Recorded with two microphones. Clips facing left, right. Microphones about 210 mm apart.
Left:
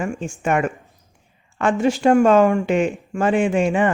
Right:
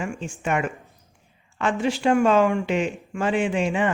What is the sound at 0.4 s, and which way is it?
Speech, 50° left (ahead or behind).